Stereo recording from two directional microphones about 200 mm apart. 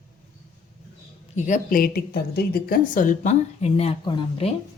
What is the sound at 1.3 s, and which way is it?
Speech, 40° left (ahead or behind).